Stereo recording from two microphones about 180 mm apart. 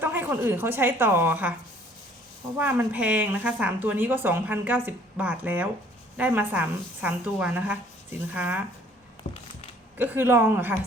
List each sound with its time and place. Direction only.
0.0 s speech: 10° right (ahead or behind)
2.6 s speech: 10° right (ahead or behind)
9.2 s a sound: 55° left (ahead or behind)
10.0 s speech: 10° right (ahead or behind)